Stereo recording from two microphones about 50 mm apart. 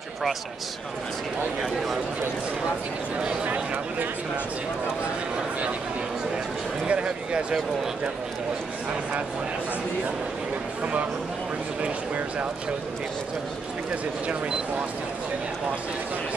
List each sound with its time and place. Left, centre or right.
3.4 s speech: right
6.9 s speech: right